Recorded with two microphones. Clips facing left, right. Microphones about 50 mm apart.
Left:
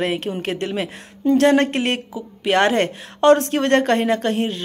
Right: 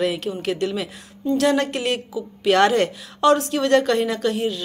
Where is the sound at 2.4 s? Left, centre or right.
Left.